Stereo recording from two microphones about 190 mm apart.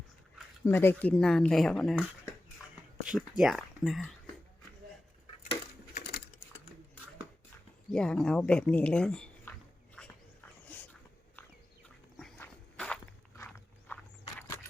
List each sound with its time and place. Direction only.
0.6 s speech: 10° left (ahead or behind)
3.1 s speech: 5° right (ahead or behind)
5.9 s typing: 55° left (ahead or behind)
7.9 s speech: 5° left (ahead or behind)
10.7 s a sound: 10° left (ahead or behind)
12.4 s horse: 5° left (ahead or behind)